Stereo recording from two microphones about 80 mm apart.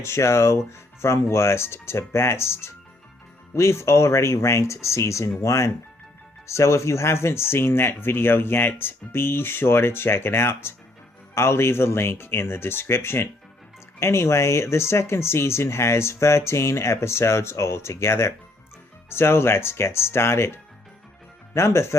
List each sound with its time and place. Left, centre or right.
0.0 s speech: left